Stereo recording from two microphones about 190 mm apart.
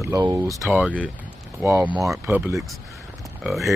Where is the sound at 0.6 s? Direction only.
5° right (ahead or behind).